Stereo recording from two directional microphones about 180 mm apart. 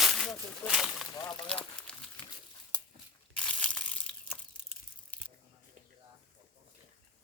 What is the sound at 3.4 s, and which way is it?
Crushing, 5° left (ahead or behind).